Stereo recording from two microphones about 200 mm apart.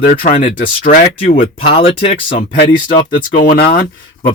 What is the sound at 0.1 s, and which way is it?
Speech, 40° left (ahead or behind).